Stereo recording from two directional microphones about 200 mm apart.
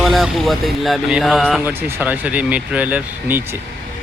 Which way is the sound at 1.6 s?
10° right (ahead or behind).